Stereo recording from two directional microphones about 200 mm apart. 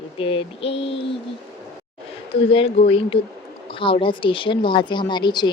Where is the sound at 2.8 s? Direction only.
30° left (ahead or behind).